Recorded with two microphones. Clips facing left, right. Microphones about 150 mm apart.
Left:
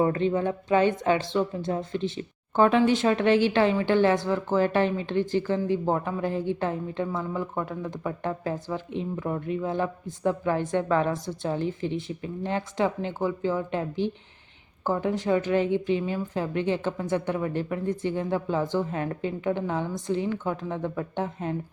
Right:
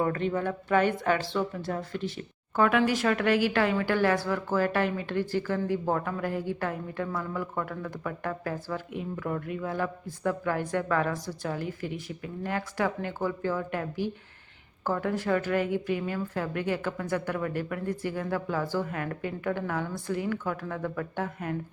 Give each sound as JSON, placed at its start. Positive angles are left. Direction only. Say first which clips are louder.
{"t": 0.0, "sound": "a woman's voice", "louder": "left 4 dB", "side_deg": 20}